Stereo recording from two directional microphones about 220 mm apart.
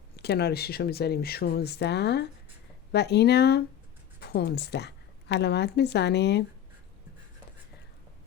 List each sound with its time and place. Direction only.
0.2 s a woman's voice: 50° left (ahead or behind)